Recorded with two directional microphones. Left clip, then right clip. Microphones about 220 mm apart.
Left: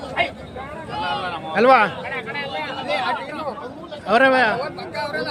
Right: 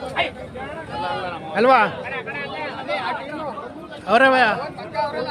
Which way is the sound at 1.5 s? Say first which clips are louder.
Left 1 dB; centre (ahead or behind).